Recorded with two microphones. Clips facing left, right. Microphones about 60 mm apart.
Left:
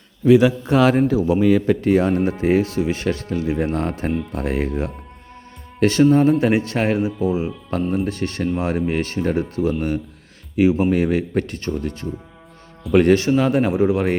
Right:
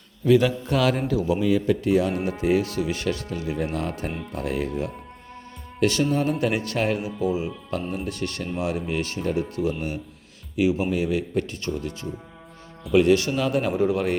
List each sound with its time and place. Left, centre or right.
0.3 s a man's voice: centre
0.8 s speech: left
1.4 s speech: left
4.1 s speech: centre
4.4 s a man's voice: left
13.1 s a man's voice: left